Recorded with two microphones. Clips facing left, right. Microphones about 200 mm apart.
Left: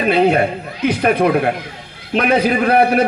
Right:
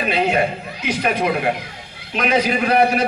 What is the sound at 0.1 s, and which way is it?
A man's voice, 55° left (ahead or behind).